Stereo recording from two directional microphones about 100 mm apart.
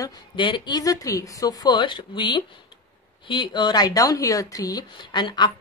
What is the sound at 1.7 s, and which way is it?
Speech, 55° left (ahead or behind).